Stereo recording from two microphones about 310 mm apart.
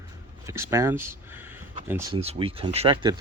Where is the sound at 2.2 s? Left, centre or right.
Centre.